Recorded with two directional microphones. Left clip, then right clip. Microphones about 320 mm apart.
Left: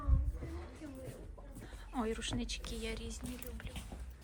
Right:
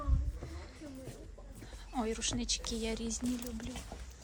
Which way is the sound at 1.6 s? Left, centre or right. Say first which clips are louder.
Right 2 dB; centre.